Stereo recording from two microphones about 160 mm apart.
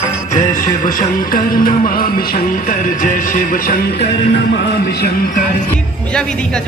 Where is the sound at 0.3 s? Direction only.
55° left (ahead or behind).